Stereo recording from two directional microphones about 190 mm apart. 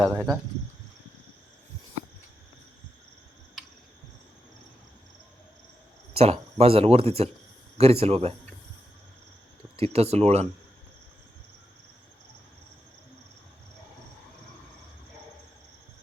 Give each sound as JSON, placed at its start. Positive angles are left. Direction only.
{"t": 0.0, "sound": "speech", "side_deg": 5}
{"t": 6.1, "sound": "speech", "side_deg": -35}
{"t": 9.7, "sound": "speech", "side_deg": -30}